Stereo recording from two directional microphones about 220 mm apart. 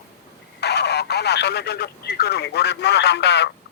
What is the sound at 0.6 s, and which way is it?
Speech, 50° left (ahead or behind).